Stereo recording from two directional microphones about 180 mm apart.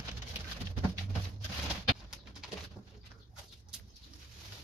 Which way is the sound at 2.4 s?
5° right (ahead or behind).